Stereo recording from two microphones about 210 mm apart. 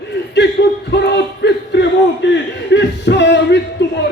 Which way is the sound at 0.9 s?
55° left (ahead or behind).